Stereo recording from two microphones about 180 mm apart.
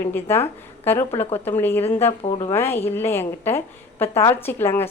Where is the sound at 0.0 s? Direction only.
10° left (ahead or behind).